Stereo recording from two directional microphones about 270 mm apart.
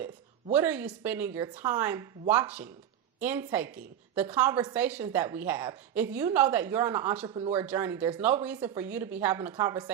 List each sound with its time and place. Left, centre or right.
0.5 s a woman's voice: centre
7.3 s speech: centre
7.5 s a woman's voice: centre